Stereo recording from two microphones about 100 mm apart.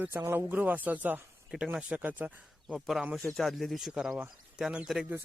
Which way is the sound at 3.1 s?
5° left (ahead or behind).